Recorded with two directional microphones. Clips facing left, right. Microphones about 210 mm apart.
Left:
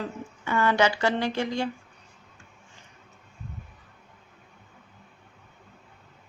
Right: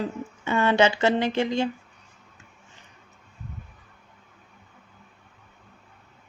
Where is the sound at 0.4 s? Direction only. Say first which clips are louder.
Right 3 dB; 25° right (ahead or behind).